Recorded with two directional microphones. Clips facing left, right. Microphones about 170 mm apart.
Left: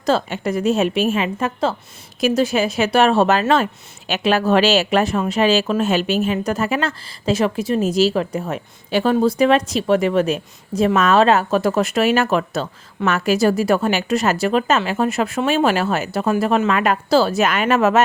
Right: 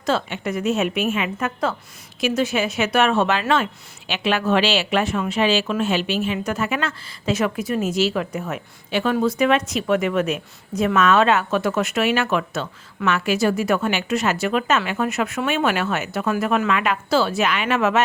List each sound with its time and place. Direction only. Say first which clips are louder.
0.0 s speech: left 4 dB; 40° left (ahead or behind)